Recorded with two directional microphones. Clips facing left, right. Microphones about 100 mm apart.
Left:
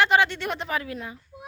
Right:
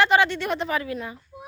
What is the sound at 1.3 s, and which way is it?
Child singing, 20° right (ahead or behind).